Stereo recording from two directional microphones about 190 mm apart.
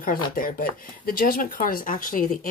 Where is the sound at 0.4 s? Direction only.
50° left (ahead or behind).